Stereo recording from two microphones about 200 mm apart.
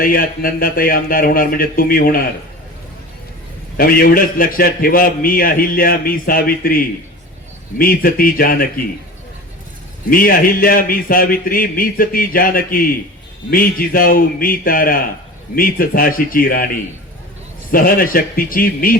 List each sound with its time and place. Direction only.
0.0 s a man's voice: 45° left (ahead or behind)
3.8 s a man's voice: 45° left (ahead or behind)
10.1 s a man's voice: 45° left (ahead or behind)
17.7 s a man's voice: 45° left (ahead or behind)